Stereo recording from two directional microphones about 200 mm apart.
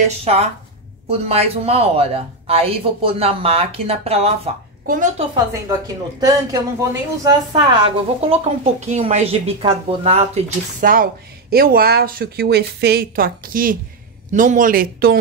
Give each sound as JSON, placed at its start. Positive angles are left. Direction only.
{"t": 0.0, "sound": "a woman's voice", "side_deg": -30}
{"t": 4.8, "sound": "a woman's voice", "side_deg": -40}
{"t": 5.3, "sound": "a woman's voice", "side_deg": -15}
{"t": 8.2, "sound": "a woman's voice", "side_deg": -30}